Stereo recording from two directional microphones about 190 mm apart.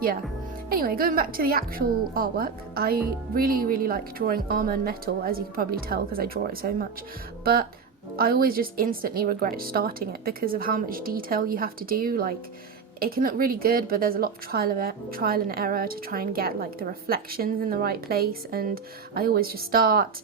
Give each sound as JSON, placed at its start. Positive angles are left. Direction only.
{"t": 0.7, "sound": "a woman's voice", "side_deg": -50}